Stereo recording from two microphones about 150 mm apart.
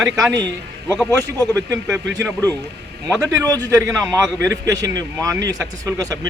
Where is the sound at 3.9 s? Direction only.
5° left (ahead or behind).